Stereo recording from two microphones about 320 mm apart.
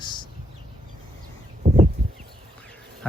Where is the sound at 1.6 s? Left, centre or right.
Right.